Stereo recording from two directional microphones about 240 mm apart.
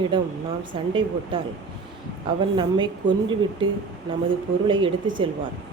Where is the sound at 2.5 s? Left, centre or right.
Centre.